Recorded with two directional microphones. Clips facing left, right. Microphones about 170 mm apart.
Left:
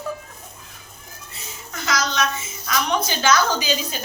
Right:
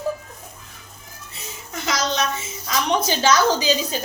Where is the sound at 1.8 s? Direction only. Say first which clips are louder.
Even; 30° right (ahead or behind).